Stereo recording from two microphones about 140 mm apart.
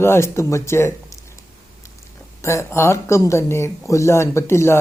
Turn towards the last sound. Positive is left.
turn(degrees=20)  # may be behind; listen again after turning